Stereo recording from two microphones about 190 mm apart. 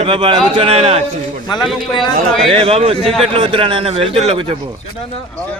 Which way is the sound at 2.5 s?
30° right (ahead or behind).